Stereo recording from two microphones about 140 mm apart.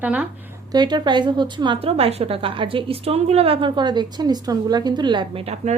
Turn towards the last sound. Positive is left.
turn(degrees=-50)  # may be behind; listen again after turning